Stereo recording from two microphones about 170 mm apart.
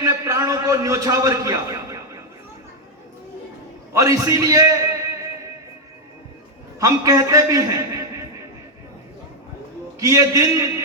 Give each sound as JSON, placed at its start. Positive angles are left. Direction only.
{"t": 0.0, "sound": "a sound", "side_deg": -20}
{"t": 3.9, "sound": "a man's voice", "side_deg": -20}
{"t": 6.7, "sound": "a man's voice", "side_deg": -20}
{"t": 10.0, "sound": "a man's voice", "side_deg": -20}